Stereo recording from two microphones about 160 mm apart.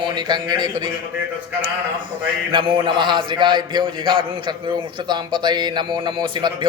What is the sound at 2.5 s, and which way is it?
A man's voice, 30° right (ahead or behind).